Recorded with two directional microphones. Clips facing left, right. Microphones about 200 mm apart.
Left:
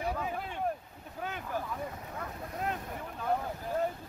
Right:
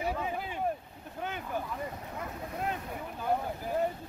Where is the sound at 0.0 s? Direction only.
5° right (ahead or behind).